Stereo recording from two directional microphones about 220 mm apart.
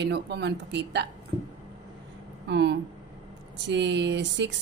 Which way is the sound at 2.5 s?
50° right (ahead or behind).